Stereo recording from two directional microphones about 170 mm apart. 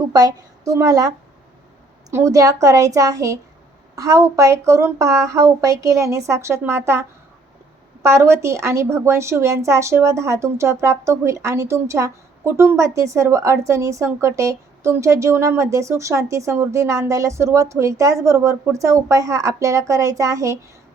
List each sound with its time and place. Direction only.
0.1 s a woman's voice: 20° right (ahead or behind)
2.1 s a woman's voice: 20° right (ahead or behind)
8.0 s a woman's voice: 15° right (ahead or behind)